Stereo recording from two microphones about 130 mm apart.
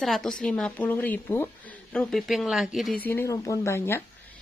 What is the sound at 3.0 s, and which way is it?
Speech, 20° left (ahead or behind).